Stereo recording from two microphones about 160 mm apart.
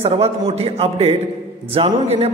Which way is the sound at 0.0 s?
40° right (ahead or behind).